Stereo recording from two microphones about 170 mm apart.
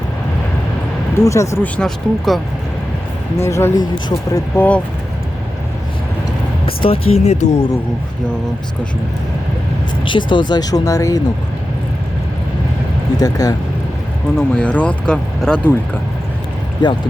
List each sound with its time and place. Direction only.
1.2 s speech: 15° left (ahead or behind)
3.4 s speech: 15° left (ahead or behind)
6.7 s speech: 35° left (ahead or behind)
10.0 s speech: 30° left (ahead or behind)
13.1 s speech: 20° left (ahead or behind)
14.3 s speech: 5° left (ahead or behind)
16.8 s speech: 25° left (ahead or behind)